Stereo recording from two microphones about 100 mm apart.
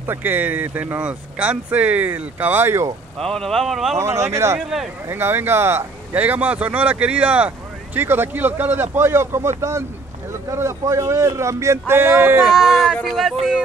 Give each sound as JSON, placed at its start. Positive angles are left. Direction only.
{"t": 0.0, "sound": "speech", "side_deg": -20}
{"t": 3.2, "sound": "speech", "side_deg": 5}
{"t": 4.0, "sound": "speech", "side_deg": -30}
{"t": 4.6, "sound": "speech", "side_deg": -5}
{"t": 5.1, "sound": "speech", "side_deg": -20}
{"t": 12.4, "sound": "speech", "side_deg": -5}